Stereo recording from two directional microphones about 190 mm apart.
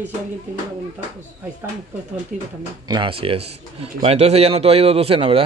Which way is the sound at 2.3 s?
45° right (ahead or behind).